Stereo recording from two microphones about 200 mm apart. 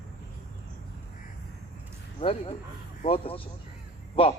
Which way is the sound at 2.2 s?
30° left (ahead or behind).